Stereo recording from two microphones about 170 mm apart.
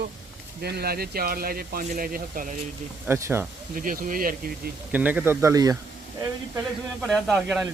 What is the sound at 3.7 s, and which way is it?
Speech, 55° right (ahead or behind).